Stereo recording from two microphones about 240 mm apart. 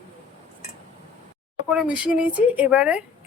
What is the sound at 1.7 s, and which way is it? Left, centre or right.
Speech, centre.